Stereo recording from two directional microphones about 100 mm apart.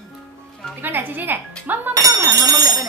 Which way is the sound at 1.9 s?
35° right (ahead or behind).